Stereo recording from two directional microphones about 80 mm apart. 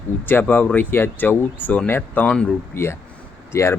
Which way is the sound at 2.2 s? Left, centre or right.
Centre.